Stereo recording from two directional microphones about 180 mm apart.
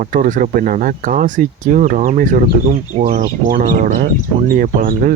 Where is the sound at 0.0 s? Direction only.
50° right (ahead or behind).